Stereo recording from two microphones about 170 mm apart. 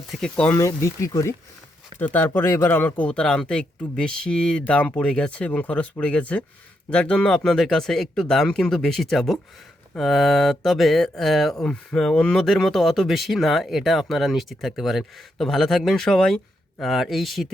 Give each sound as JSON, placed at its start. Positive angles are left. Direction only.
{"t": 0.1, "sound": "speech", "side_deg": 5}
{"t": 0.5, "sound": "speech", "side_deg": 20}